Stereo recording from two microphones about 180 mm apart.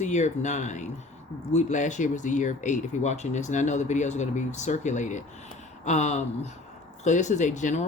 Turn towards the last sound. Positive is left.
turn(degrees=40)  # may be behind; listen again after turning